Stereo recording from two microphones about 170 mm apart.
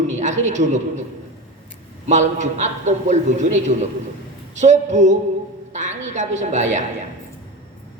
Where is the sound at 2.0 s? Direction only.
45° right (ahead or behind).